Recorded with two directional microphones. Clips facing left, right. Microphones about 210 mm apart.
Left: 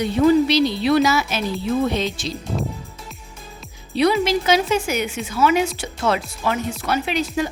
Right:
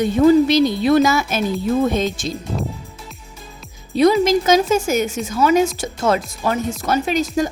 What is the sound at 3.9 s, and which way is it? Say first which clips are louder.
Speech: right 4 dB; 45° right (ahead or behind).